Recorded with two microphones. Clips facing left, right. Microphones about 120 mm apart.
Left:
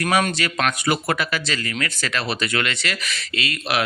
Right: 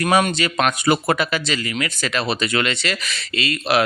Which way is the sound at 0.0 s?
20° right (ahead or behind).